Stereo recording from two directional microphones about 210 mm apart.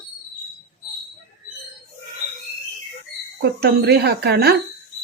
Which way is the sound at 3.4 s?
50° right (ahead or behind).